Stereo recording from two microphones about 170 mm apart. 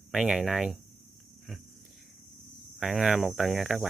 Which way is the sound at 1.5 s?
Centre (ahead or behind).